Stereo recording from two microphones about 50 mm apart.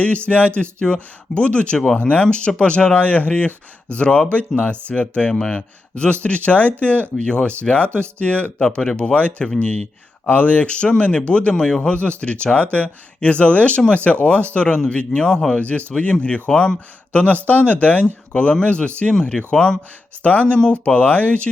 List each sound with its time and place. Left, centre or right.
0.0 s speech: left
7.9 s speech: right
8.2 s speech: left
8.5 s speech: centre
10.2 s speech: left